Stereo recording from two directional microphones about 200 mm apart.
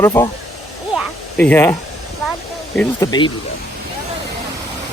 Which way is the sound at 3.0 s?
20° left (ahead or behind).